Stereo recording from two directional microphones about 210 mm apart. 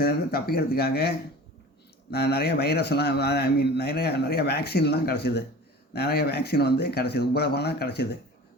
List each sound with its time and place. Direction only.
0.0 s a man's voice: 45° left (ahead or behind)